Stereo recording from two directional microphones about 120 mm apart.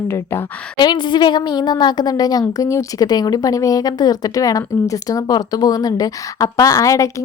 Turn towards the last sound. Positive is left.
turn(degrees=25)  # may be behind; listen again after turning